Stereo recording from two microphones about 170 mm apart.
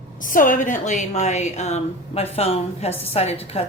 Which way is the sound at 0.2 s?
50° left (ahead or behind).